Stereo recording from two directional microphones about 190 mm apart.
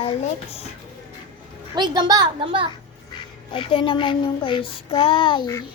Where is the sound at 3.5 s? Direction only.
25° left (ahead or behind).